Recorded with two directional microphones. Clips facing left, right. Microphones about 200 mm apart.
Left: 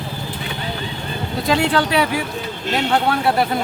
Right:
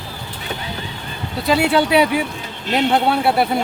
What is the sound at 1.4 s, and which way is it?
Speech, 5° right (ahead or behind).